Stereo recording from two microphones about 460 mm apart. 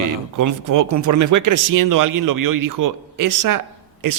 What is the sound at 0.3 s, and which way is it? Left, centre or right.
A man's voice, right.